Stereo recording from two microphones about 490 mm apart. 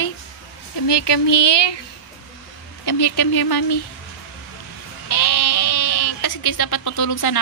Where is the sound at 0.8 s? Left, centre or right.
Left.